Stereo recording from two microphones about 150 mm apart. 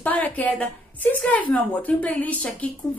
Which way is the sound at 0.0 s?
10° left (ahead or behind).